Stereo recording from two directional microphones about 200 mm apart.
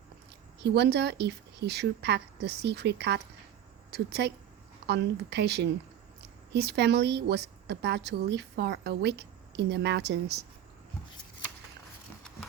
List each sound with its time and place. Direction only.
0.6 s a woman's voice: 55° right (ahead or behind)